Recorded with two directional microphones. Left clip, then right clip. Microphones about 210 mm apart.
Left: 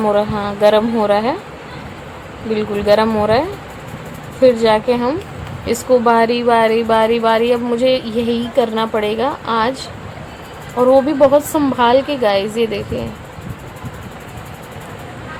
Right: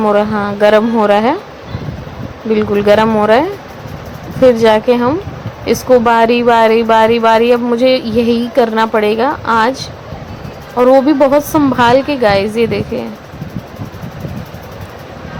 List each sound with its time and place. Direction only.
0.0 s a woman's voice: 25° right (ahead or behind)
2.5 s a woman's voice: 25° right (ahead or behind)
4.4 s a woman's voice: 25° right (ahead or behind)